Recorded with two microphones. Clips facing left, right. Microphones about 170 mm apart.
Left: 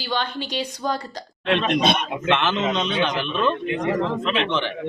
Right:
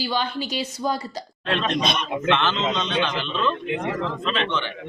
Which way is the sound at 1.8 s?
60° left (ahead or behind).